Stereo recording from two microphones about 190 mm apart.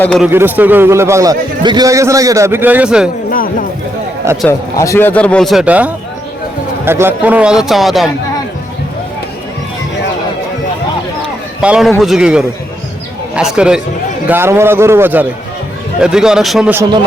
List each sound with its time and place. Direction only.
0.2 s a man's voice: 10° right (ahead or behind)
3.2 s music: 50° left (ahead or behind)
4.8 s a man's voice: 15° left (ahead or behind)
11.6 s a man's voice: 5° right (ahead or behind)